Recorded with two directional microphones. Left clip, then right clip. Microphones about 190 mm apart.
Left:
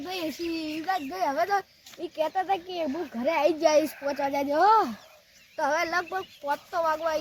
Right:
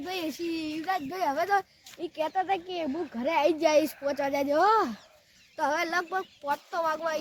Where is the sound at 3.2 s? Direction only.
35° right (ahead or behind).